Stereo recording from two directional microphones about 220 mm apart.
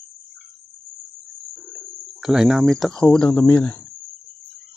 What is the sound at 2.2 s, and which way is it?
Speech, centre (ahead or behind).